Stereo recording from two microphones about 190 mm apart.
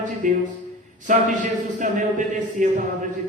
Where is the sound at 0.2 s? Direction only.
45° right (ahead or behind).